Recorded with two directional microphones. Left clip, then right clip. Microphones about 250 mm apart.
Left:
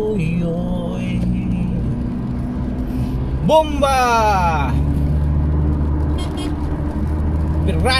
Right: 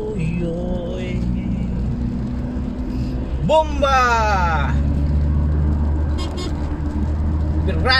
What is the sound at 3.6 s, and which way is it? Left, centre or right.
Speech, centre.